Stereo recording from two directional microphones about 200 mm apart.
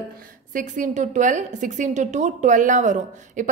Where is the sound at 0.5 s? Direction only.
40° right (ahead or behind).